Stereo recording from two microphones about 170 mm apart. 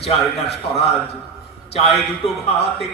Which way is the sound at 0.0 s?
35° left (ahead or behind).